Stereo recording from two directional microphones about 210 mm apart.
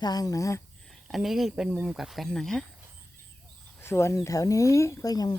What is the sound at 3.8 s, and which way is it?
Speech, 10° left (ahead or behind).